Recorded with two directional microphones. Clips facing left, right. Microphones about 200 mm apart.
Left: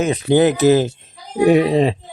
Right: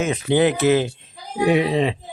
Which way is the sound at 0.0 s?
40° left (ahead or behind).